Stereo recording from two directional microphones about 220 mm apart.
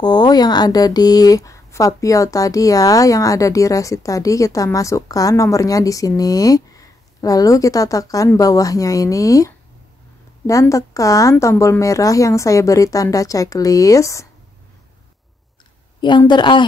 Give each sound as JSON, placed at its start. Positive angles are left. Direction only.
{"t": 0.0, "sound": "speech", "side_deg": 20}
{"t": 16.0, "sound": "a woman's voice", "side_deg": 20}